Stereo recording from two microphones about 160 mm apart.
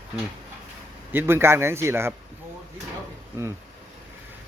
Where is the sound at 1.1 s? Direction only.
15° right (ahead or behind).